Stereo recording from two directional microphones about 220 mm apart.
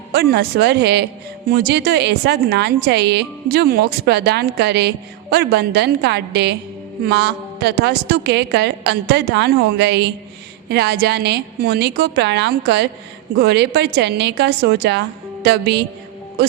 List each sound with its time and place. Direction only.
0.1 s a woman's voice: 50° right (ahead or behind)